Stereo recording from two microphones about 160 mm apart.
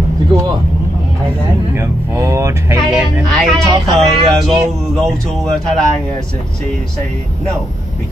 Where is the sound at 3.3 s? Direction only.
Centre (ahead or behind).